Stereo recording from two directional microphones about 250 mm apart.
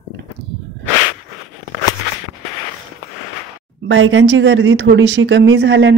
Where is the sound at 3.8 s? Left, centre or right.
Right.